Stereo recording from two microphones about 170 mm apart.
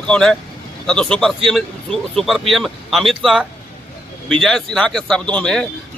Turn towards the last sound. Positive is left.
turn(degrees=5)  # may be behind; listen again after turning